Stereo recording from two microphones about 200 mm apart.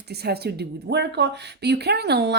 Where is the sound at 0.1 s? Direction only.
55° right (ahead or behind).